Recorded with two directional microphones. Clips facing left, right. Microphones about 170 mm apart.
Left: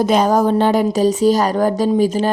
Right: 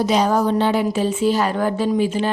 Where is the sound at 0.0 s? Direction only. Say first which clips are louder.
Left 3 dB; 50° left (ahead or behind).